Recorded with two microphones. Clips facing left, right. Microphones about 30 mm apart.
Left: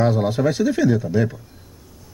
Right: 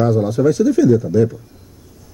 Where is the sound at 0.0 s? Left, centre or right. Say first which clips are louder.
Right 4 dB; left.